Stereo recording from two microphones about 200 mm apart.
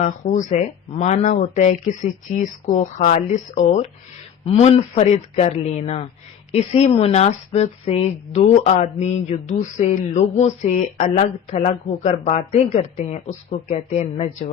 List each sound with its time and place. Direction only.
0.0 s speech: 40° left (ahead or behind)